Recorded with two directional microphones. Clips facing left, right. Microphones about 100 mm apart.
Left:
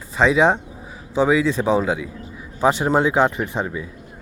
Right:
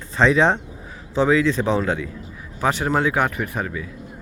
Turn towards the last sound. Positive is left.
turn(degrees=25)  # may be behind; listen again after turning